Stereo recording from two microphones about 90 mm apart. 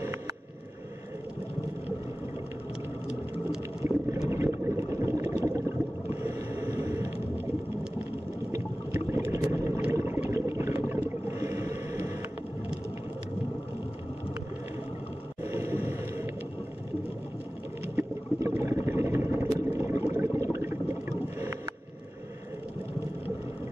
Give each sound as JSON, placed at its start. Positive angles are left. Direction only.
{"t": 3.8, "sound": "a sound", "side_deg": -30}
{"t": 6.7, "sound": "vehicle", "side_deg": -35}
{"t": 8.9, "sound": "boat", "side_deg": -25}
{"t": 9.8, "sound": "a sound", "side_deg": -30}
{"t": 11.3, "sound": "whale vocalization", "side_deg": -35}
{"t": 15.4, "sound": "boat", "side_deg": -25}
{"t": 17.9, "sound": "vehicle", "side_deg": -30}